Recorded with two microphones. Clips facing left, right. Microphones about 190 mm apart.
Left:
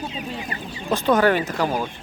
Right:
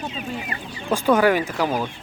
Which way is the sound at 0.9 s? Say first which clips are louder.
Right 1 dB; 10° right (ahead or behind).